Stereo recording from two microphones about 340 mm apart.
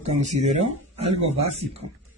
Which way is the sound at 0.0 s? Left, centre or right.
Centre.